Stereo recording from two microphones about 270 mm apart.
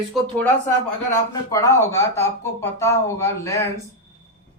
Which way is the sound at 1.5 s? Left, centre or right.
Centre.